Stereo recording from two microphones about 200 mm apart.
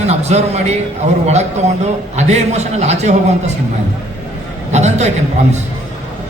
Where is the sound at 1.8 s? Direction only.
35° right (ahead or behind).